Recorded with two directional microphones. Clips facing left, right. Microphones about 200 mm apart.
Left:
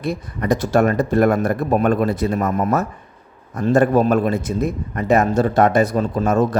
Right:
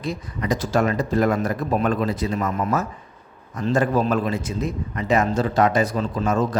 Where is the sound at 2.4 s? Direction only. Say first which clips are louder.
Left 4 dB; 40° left (ahead or behind).